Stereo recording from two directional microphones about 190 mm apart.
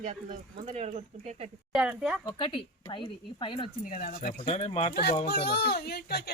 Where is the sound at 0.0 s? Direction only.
40° right (ahead or behind).